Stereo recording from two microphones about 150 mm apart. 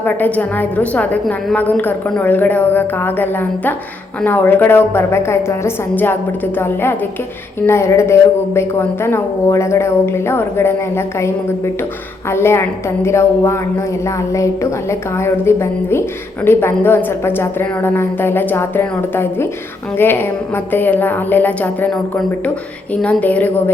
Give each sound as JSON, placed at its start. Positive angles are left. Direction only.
{"t": 0.0, "sound": "a woman's voice", "side_deg": 10}
{"t": 7.6, "sound": "a woman's voice", "side_deg": 15}
{"t": 23.0, "sound": "a woman's voice", "side_deg": 5}